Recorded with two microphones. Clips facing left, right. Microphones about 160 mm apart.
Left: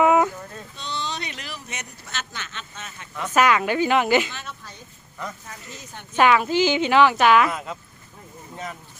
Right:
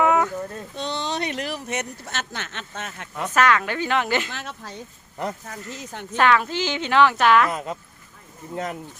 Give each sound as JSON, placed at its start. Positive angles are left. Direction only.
{"t": 0.0, "sound": "a sound", "side_deg": 10}
{"t": 0.8, "sound": "a sound", "side_deg": -65}
{"t": 3.3, "sound": "a woman's voice", "side_deg": 10}
{"t": 4.3, "sound": "speech", "side_deg": -90}
{"t": 5.2, "sound": "speech", "side_deg": -75}
{"t": 6.1, "sound": "a woman's voice", "side_deg": 10}